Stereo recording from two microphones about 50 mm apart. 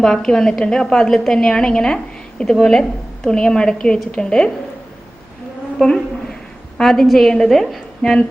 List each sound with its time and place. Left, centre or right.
0.0 s a woman's voice: centre
5.8 s a sound: centre
6.7 s a woman's voice: centre